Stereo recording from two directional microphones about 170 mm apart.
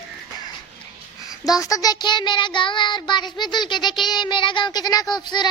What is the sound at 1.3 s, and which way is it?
Child singing, 20° left (ahead or behind).